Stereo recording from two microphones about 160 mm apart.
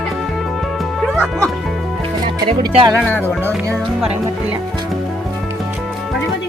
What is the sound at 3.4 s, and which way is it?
Music, 15° right (ahead or behind).